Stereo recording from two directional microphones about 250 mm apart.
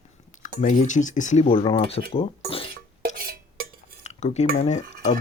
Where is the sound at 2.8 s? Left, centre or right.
Right.